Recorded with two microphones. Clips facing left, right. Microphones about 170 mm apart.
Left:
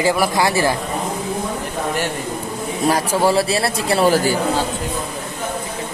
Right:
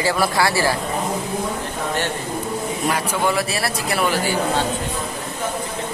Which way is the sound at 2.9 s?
35° left (ahead or behind).